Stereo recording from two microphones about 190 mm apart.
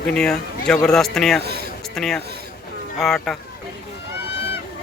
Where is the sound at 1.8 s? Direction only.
Centre (ahead or behind).